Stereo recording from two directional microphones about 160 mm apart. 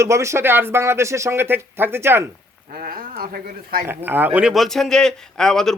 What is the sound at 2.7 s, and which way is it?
Speech, 60° right (ahead or behind).